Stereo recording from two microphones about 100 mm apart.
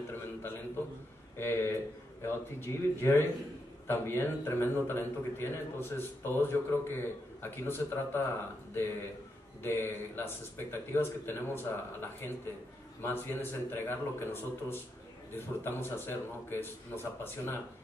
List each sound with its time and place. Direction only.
1.4 s a man's voice: 20° left (ahead or behind)